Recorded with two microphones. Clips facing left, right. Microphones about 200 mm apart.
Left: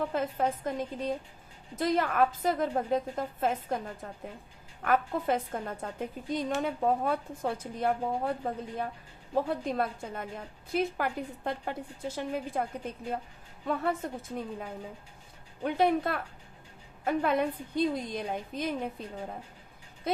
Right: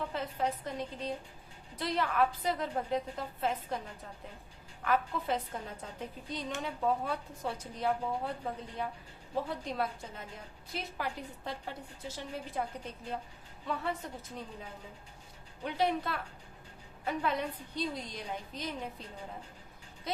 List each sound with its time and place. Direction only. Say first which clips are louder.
0.1 s a woman's voice: left 5 dB; 50° left (ahead or behind)